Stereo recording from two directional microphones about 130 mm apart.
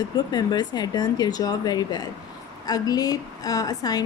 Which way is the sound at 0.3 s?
30° left (ahead or behind).